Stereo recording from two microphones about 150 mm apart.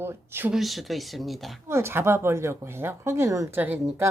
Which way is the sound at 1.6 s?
15° right (ahead or behind).